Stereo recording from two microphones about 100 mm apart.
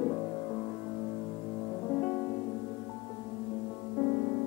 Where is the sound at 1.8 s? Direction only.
20° left (ahead or behind).